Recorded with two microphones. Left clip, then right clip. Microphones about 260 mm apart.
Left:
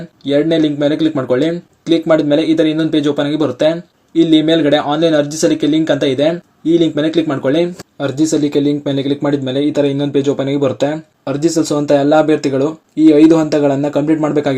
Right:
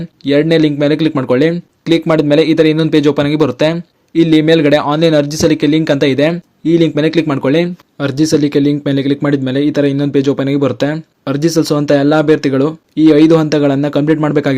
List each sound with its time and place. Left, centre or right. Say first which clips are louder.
0.3 s speech: right 2 dB; right
11.9 s speech: even; right